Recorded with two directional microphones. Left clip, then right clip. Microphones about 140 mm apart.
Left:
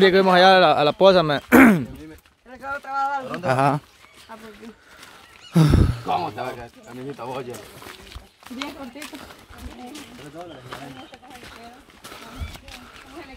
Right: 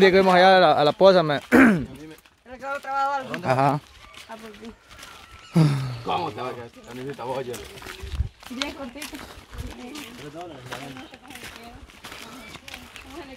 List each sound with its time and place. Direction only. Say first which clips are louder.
0.0 s speech: left 1 dB; 10° left (ahead or behind); by 1.9 s 25° left (ahead or behind)
2.6 s speech: even; 40° right (ahead or behind)
3.4 s speech: left 1 dB; 15° left (ahead or behind)
5.5 s a sound: left 4 dB; 25° left (ahead or behind)
6.1 s speech: left 2 dB; 45° left (ahead or behind)